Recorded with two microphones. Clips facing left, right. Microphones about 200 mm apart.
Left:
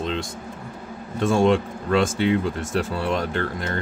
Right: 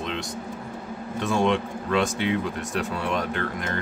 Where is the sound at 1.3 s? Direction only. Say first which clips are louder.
Left 4 dB; 35° left (ahead or behind).